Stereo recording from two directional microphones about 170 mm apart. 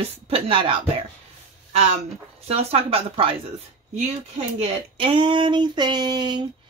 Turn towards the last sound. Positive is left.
turn(degrees=-25)  # may be behind; listen again after turning